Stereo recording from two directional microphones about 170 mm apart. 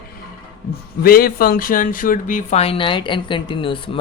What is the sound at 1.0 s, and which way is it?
Speech, 60° left (ahead or behind).